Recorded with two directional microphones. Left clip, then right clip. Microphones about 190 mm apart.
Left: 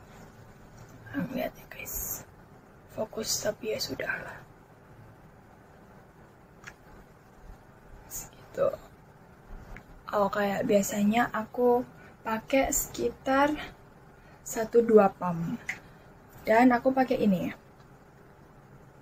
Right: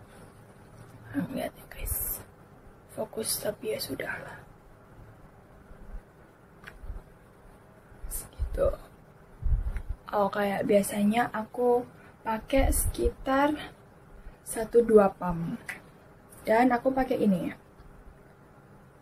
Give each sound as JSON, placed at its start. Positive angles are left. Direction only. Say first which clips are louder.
{"t": 1.1, "sound": "whispering", "louder": "even", "side_deg": 0}
{"t": 3.0, "sound": "a woman's voice", "louder": "left 1 dB", "side_deg": 0}
{"t": 8.1, "sound": "a sound", "louder": "left 2 dB", "side_deg": 0}
{"t": 10.0, "sound": "a woman's voice", "louder": "even", "side_deg": 0}